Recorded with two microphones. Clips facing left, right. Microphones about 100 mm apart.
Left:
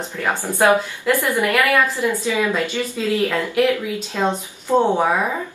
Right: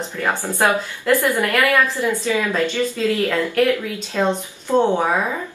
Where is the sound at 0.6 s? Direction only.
15° left (ahead or behind).